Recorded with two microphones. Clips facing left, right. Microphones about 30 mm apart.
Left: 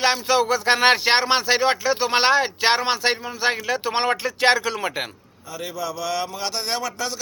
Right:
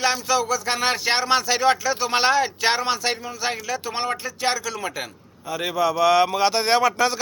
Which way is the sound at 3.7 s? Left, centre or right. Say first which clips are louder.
Left 4 dB; left.